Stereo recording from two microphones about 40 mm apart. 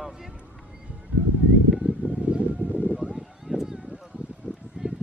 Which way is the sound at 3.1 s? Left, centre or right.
Centre.